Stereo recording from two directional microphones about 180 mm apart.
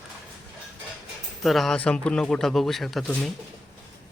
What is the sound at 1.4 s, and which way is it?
Speech, centre (ahead or behind).